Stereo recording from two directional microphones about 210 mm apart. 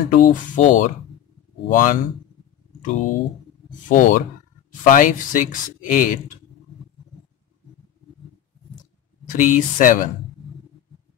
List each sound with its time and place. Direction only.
0.1 s speech: 40° left (ahead or behind)
9.2 s speech: 40° left (ahead or behind)